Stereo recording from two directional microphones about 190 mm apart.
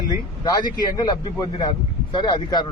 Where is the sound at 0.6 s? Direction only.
20° left (ahead or behind).